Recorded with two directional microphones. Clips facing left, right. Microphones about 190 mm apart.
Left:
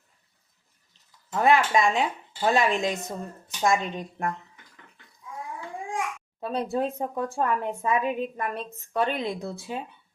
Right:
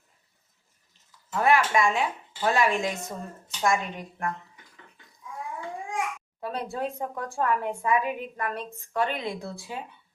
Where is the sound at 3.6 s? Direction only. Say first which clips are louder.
Left 2 dB; 20° left (ahead or behind).